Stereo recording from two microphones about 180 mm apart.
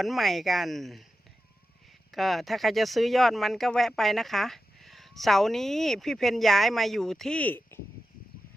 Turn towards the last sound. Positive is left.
turn(degrees=10)  # may be behind; listen again after turning